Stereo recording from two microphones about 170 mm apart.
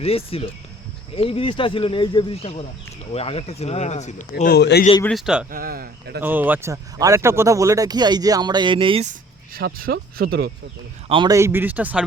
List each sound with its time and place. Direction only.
0.0 s speech: 35° left (ahead or behind)
4.4 s a man's voice: 70° left (ahead or behind)
5.0 s a man's voice: centre (ahead or behind)
5.5 s speech: 60° right (ahead or behind)
6.2 s speech: 10° right (ahead or behind); by 9.0 s 30° right (ahead or behind)
9.6 s speech: 60° right (ahead or behind)
11.1 s speech: 30° right (ahead or behind)
11.3 s speech: 15° right (ahead or behind)